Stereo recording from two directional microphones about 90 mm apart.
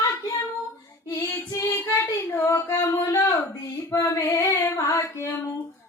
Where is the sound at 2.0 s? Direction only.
30° left (ahead or behind).